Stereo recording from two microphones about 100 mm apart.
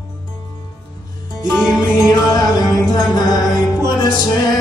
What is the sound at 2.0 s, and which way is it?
Music, 40° left (ahead or behind).